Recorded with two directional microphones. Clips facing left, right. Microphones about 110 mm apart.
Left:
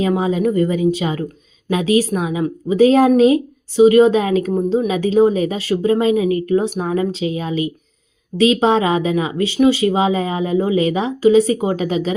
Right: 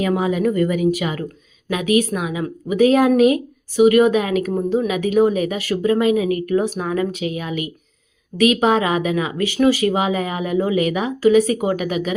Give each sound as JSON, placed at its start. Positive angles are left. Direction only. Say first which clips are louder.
{"t": 0.2, "sound": "speech", "louder": "left 2 dB", "side_deg": 25}